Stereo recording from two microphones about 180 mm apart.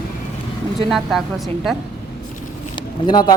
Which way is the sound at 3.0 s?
20° left (ahead or behind).